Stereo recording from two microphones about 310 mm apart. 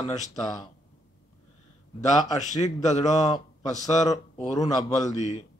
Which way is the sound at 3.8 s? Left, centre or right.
Left.